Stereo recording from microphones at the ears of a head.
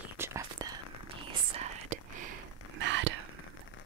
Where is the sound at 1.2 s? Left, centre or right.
Right.